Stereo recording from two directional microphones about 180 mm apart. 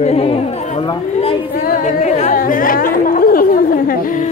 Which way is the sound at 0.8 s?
30° left (ahead or behind).